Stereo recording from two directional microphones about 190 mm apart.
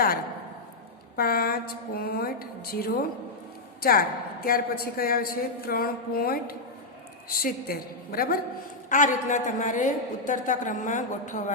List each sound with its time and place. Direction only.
1.1 s a man's voice: 50° left (ahead or behind)